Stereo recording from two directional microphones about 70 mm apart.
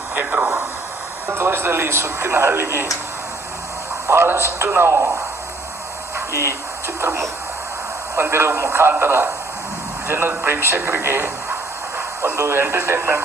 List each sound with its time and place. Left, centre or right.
0.1 s a sound: centre
1.3 s speech: right
4.0 s speech: right
6.1 s a sound: right
6.8 s music: right
8.1 s speech: right